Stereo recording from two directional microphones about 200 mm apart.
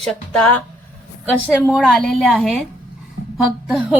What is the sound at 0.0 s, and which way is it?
Speech, 5° left (ahead or behind).